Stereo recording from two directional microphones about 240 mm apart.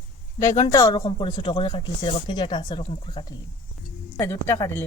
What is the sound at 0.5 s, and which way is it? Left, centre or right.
Speech, centre.